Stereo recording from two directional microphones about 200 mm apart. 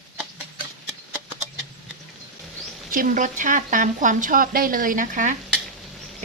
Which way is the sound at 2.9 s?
45° right (ahead or behind).